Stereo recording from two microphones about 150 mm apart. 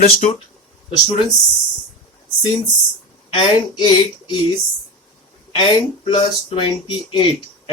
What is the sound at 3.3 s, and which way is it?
Speech, 30° left (ahead or behind).